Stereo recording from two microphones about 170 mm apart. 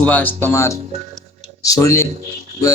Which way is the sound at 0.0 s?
10° left (ahead or behind).